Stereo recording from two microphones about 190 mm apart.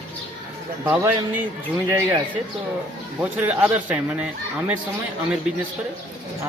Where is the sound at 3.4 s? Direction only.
10° right (ahead or behind).